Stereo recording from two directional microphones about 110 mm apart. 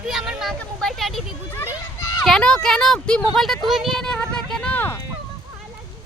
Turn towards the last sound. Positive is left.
turn(degrees=15)  # may be behind; listen again after turning